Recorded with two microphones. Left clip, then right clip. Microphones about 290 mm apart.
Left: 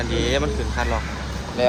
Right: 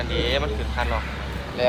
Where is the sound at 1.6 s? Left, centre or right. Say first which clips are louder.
Left 2 dB; left.